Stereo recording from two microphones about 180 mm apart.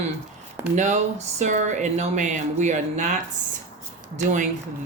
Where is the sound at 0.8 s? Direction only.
40° right (ahead or behind).